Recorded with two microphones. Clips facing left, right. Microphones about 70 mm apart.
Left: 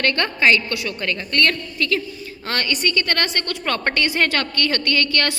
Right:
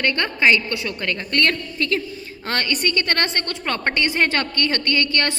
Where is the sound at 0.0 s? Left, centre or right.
Centre.